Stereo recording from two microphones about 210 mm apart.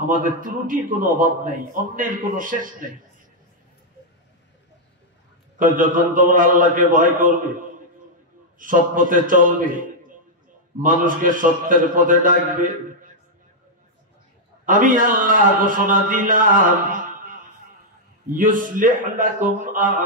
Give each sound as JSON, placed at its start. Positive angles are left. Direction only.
{"t": 0.2, "sound": "a man's voice", "side_deg": -40}
{"t": 5.6, "sound": "a man's voice", "side_deg": -40}
{"t": 8.5, "sound": "a man's voice", "side_deg": -40}
{"t": 14.7, "sound": "a man's voice", "side_deg": -40}